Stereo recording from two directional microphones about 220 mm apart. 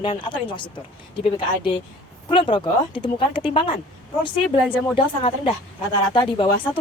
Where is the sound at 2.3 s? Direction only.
20° left (ahead or behind).